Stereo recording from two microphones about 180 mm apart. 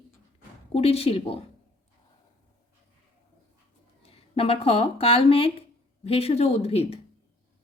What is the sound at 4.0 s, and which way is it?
Speech, 30° left (ahead or behind).